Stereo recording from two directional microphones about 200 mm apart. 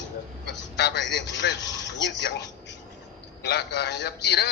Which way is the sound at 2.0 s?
55° left (ahead or behind).